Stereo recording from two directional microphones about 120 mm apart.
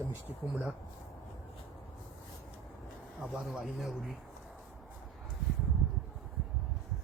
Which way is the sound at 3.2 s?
5° right (ahead or behind).